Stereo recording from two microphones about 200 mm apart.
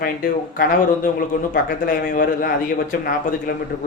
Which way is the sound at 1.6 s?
45° left (ahead or behind).